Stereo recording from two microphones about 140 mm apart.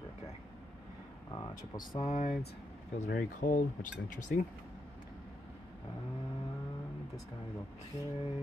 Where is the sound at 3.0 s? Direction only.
75° left (ahead or behind).